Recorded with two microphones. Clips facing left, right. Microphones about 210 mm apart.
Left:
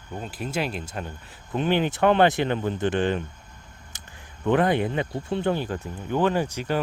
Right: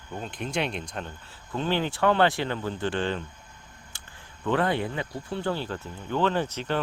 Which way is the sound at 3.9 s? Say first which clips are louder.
Left 3 dB; 20° left (ahead or behind).